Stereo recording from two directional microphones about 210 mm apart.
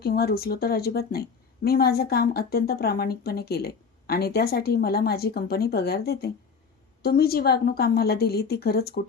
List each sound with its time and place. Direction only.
0.0 s speech: 45° left (ahead or behind)